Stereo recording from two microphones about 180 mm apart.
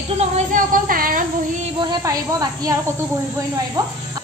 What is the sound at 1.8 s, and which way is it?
Speech, 20° right (ahead or behind).